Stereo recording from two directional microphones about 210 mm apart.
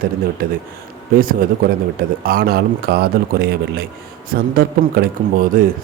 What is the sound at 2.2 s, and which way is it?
Speech, 45° right (ahead or behind).